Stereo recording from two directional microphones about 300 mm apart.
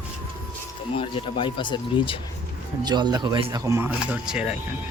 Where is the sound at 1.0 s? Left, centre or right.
Centre.